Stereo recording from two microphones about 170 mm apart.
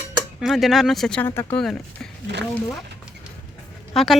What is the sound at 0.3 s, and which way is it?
Speech, centre (ahead or behind).